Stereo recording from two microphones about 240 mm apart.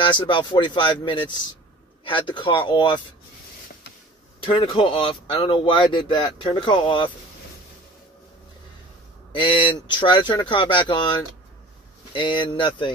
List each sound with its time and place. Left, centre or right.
0.0 s speech: left
4.5 s speech: left
9.3 s speech: left